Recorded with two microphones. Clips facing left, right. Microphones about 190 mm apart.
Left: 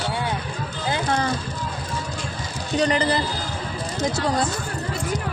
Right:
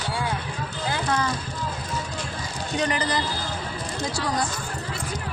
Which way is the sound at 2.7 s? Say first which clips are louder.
Left 5 dB; 30° left (ahead or behind).